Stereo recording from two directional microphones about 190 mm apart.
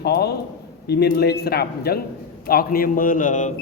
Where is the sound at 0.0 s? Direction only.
60° left (ahead or behind).